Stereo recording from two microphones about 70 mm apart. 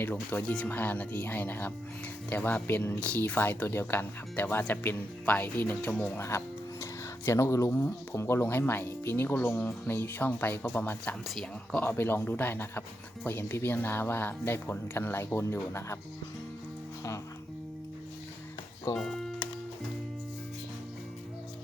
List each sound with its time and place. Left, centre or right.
0.0 s speech: left
3.0 s speech: left
6.1 s music: left
7.3 s speech: left
18.9 s speech: centre